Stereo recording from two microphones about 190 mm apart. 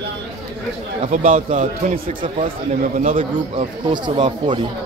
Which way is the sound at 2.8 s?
45° right (ahead or behind).